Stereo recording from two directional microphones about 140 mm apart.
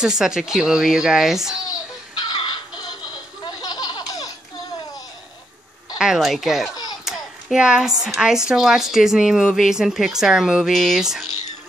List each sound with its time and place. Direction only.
0.0 s a woman's voice: 5° right (ahead or behind)
2.1 s baby laughter: 30° left (ahead or behind)
3.4 s laughter: 30° left (ahead or behind)
5.9 s a woman's voice: 5° right (ahead or behind)
7.1 s hands: 5° right (ahead or behind)
8.2 s a woman's voice: 5° right (ahead or behind)